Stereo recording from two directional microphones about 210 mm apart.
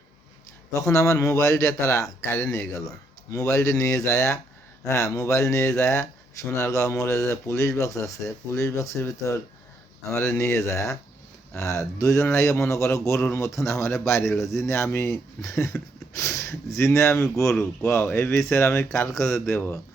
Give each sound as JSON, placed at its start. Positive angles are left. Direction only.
{"t": 0.7, "sound": "a man's voice", "side_deg": 15}